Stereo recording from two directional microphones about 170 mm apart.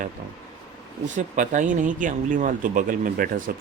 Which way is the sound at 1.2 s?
45° right (ahead or behind).